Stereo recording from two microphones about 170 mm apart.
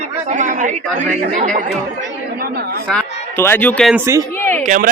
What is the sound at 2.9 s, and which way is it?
Speech, 15° left (ahead or behind).